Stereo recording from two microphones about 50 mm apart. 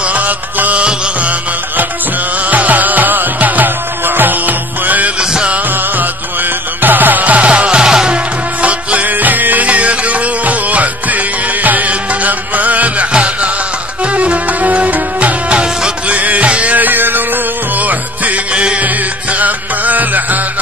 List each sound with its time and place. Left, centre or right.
0.1 s music: right
2.5 s music: right
6.8 s music: right; by 8.2 s centre
8.6 s music: right
13.1 s music: centre
14.6 s music: right
18.5 s music: centre
19.3 s music: right